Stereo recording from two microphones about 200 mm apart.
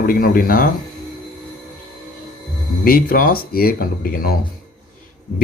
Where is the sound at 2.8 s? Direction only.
45° left (ahead or behind).